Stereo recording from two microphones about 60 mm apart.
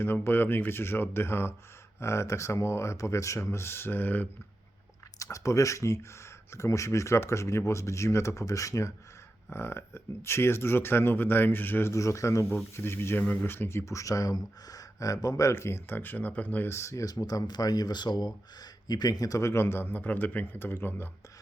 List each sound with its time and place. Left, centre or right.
0.0 s speech: left
5.2 s speech: left
9.5 s speech: left
11.9 s speech: left
12.7 s speech: left
15.5 s speech: left
16.6 s speech: left